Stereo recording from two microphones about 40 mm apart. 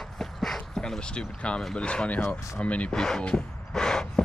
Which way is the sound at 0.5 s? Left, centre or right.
Centre.